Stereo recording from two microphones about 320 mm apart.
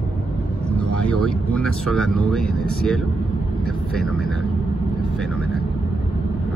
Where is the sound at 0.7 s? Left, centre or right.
Centre.